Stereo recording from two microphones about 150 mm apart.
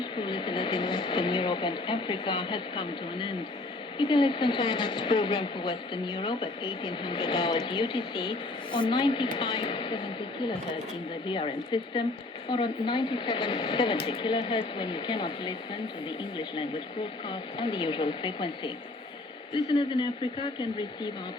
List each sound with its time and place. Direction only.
0.0 s a woman's voice: 35° left (ahead or behind)
11.3 s a woman's voice: 35° left (ahead or behind)